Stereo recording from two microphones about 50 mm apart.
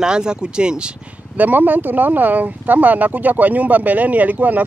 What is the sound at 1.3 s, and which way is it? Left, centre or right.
Speech, right.